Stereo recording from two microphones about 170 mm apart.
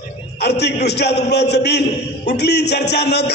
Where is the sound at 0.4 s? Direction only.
75° left (ahead or behind).